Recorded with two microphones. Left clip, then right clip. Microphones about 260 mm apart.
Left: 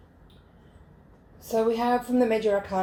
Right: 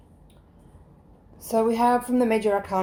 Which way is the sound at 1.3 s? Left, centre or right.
Right.